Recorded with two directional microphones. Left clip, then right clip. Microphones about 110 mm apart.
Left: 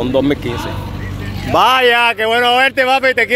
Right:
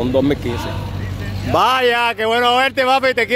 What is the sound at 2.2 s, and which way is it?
Speech, 60° right (ahead or behind).